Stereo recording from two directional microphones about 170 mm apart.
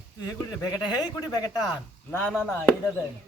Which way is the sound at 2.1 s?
10° left (ahead or behind).